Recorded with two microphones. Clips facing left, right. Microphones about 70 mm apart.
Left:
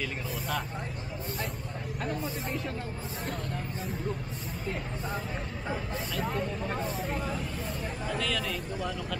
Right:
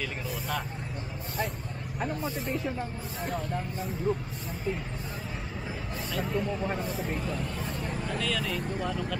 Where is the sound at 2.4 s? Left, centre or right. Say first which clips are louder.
Right 3 dB; centre.